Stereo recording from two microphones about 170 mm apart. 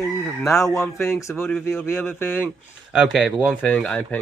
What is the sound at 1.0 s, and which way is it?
Speech, 15° left (ahead or behind).